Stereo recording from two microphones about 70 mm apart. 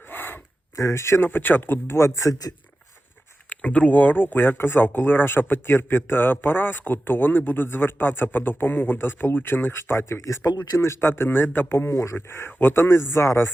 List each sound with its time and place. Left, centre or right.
0.1 s gasp: left
0.8 s a man's voice: left
3.5 s a man's voice: left
10.2 s a man's voice: left
11.9 s speech: left
12.1 s a man's voice: left